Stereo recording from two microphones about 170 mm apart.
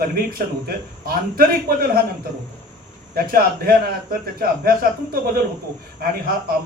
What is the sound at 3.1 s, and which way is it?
A man's voice, 60° right (ahead or behind).